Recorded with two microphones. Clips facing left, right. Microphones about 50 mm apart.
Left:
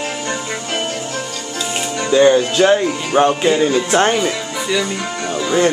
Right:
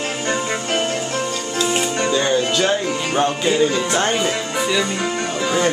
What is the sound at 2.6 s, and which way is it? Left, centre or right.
Speech, centre.